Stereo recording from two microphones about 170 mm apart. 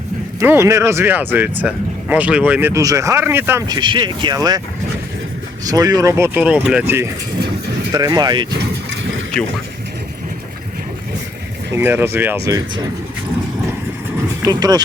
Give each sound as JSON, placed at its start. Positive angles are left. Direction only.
{"t": 0.3, "sound": "speech", "side_deg": -15}
{"t": 3.7, "sound": "speech", "side_deg": -25}
{"t": 5.6, "sound": "speech", "side_deg": -20}
{"t": 11.7, "sound": "speech", "side_deg": -10}
{"t": 14.4, "sound": "speech", "side_deg": -20}